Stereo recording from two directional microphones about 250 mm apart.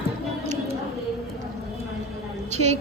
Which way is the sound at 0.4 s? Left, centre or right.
Right.